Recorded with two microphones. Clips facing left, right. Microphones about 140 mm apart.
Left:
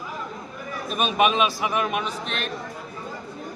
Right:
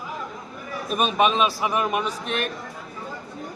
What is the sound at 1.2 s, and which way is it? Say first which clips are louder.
Speech: left 1 dB; 5° left (ahead or behind).